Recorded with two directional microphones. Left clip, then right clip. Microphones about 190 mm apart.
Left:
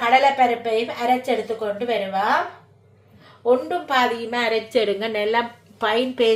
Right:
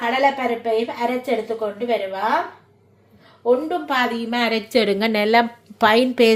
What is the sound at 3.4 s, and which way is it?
A woman's voice, 35° right (ahead or behind).